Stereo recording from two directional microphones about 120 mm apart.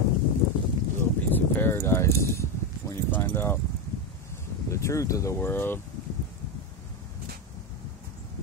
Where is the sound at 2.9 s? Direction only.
20° left (ahead or behind).